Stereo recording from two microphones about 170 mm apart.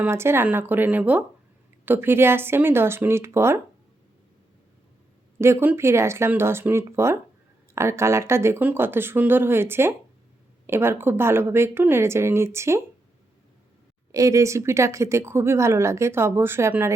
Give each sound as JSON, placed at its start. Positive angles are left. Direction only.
{"t": 0.0, "sound": "speech", "side_deg": -15}
{"t": 5.4, "sound": "speech", "side_deg": -15}
{"t": 14.1, "sound": "speech", "side_deg": -20}